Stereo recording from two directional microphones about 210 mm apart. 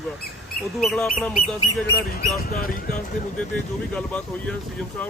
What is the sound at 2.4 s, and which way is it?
Speech, 45° left (ahead or behind).